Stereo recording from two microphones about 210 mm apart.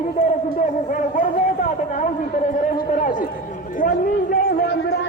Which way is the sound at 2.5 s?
35° left (ahead or behind).